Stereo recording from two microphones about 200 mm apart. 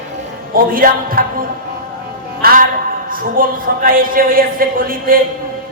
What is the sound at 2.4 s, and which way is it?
A woman's voice, 45° right (ahead or behind).